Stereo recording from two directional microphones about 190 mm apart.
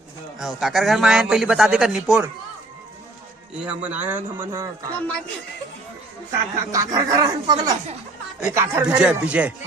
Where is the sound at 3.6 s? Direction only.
5° right (ahead or behind).